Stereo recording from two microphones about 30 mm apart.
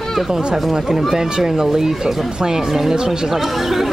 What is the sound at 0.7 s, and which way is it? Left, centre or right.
Speech, centre.